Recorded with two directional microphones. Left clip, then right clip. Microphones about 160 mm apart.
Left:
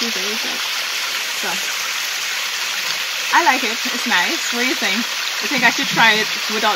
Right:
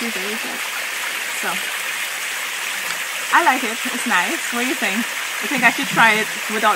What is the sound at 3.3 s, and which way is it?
Speech, 15° right (ahead or behind).